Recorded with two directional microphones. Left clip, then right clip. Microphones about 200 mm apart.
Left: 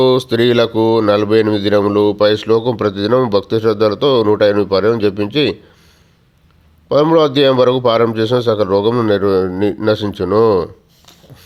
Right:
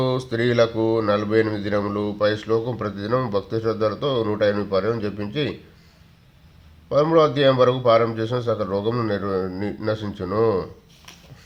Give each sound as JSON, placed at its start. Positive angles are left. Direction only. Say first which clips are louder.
{"t": 0.0, "sound": "speech", "louder": "left 11 dB", "side_deg": 45}
{"t": 6.8, "sound": "speech", "louder": "left 6 dB", "side_deg": 45}